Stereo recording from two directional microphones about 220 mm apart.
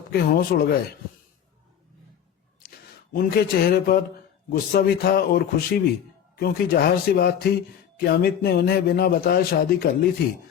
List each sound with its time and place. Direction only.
0.1 s a man's voice: 45° left (ahead or behind)
2.6 s a man's voice: 40° left (ahead or behind)